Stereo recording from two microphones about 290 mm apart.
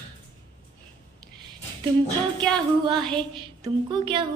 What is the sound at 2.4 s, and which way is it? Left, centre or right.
Speech, centre.